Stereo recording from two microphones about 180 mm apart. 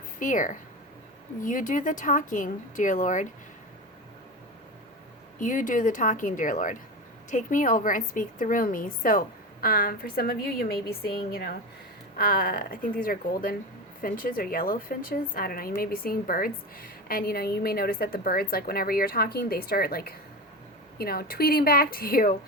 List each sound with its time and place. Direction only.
0.2 s a woman's voice: 45° left (ahead or behind)
5.4 s a woman's voice: 45° left (ahead or behind)